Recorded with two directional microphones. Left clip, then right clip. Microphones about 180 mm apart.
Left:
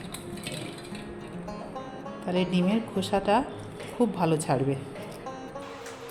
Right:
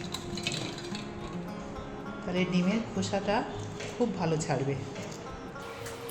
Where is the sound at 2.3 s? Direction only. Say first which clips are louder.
Left 4 dB; 40° left (ahead or behind).